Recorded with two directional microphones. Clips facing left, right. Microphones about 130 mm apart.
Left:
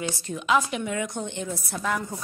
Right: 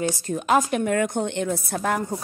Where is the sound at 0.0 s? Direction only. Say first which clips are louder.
Right 5 dB; 45° right (ahead or behind).